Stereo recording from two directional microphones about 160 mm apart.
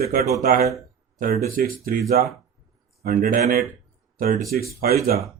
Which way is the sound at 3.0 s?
60° right (ahead or behind).